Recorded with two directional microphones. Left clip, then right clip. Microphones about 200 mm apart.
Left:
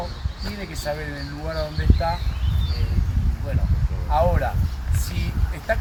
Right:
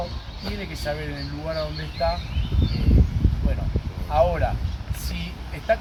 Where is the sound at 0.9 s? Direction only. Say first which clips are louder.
Left 1 dB; 5° right (ahead or behind).